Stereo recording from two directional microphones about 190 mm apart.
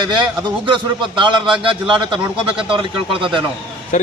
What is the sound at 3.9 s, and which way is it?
Speech, 40° left (ahead or behind).